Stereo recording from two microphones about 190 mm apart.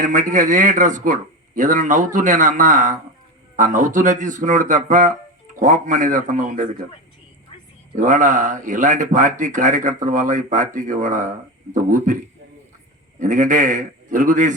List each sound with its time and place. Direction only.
0.0 s speech: 40° right (ahead or behind)
7.9 s speech: 40° right (ahead or behind)
13.1 s speech: 40° right (ahead or behind)